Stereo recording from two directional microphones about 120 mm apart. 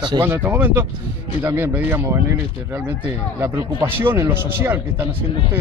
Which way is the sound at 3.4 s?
20° right (ahead or behind).